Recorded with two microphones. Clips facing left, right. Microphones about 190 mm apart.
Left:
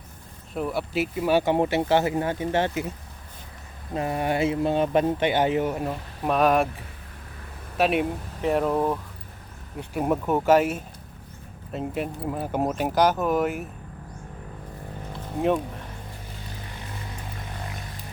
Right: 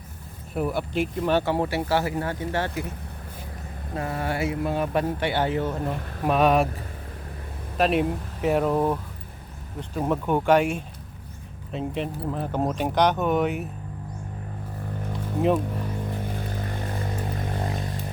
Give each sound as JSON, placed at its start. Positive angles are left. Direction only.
{"t": 0.5, "sound": "speech", "side_deg": 0}
{"t": 3.9, "sound": "speech", "side_deg": 20}
{"t": 6.2, "sound": "speech", "side_deg": 0}
{"t": 7.8, "sound": "speech", "side_deg": 0}
{"t": 9.9, "sound": "speech", "side_deg": 10}
{"t": 15.4, "sound": "speech", "side_deg": 0}
{"t": 16.6, "sound": "vehicle", "side_deg": -50}